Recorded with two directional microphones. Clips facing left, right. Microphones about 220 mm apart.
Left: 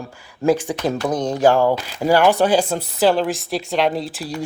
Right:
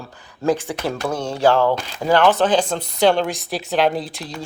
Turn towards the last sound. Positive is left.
turn(degrees=0)  # may be behind; listen again after turning